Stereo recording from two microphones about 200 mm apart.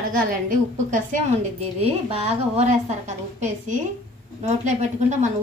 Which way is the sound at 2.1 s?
30° right (ahead or behind).